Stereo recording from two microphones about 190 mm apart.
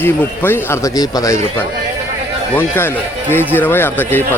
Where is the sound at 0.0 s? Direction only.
10° left (ahead or behind).